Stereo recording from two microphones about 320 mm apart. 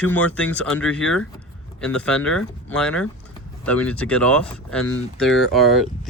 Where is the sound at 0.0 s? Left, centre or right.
Centre.